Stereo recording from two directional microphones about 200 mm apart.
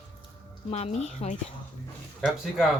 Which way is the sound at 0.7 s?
30° left (ahead or behind).